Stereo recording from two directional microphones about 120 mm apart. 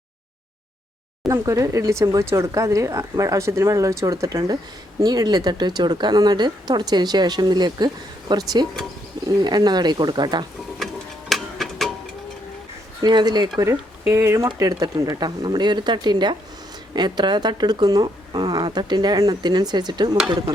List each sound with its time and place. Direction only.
1.3 s speech: 25° right (ahead or behind)
11.3 s music: centre (ahead or behind)
13.0 s speech: 35° right (ahead or behind)
13.6 s speech: 20° right (ahead or behind); by 20.1 s 40° right (ahead or behind)